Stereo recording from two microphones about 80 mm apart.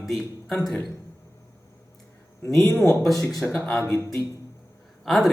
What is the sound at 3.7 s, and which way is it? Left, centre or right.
Speech, left.